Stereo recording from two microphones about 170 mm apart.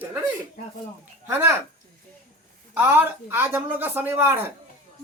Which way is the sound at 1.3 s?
15° right (ahead or behind).